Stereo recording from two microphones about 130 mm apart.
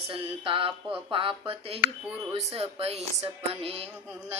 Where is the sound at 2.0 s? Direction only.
10° right (ahead or behind).